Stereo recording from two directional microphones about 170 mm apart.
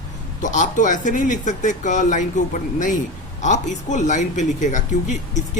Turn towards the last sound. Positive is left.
turn(degrees=45)  # may be behind; listen again after turning